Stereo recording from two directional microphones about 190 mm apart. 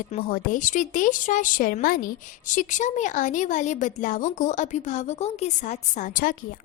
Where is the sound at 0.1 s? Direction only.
50° left (ahead or behind).